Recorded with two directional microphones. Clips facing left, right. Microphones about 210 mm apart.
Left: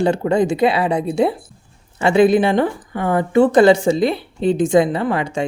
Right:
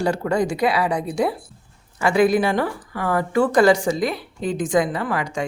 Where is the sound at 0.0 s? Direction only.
25° left (ahead or behind).